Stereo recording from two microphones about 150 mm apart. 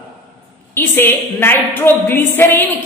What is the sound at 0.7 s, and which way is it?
A woman's voice, 15° left (ahead or behind).